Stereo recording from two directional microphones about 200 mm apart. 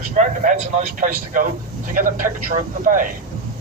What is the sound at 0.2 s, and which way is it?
A man's voice, 40° right (ahead or behind).